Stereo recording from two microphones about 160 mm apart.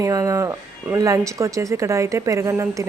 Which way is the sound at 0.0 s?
20° right (ahead or behind).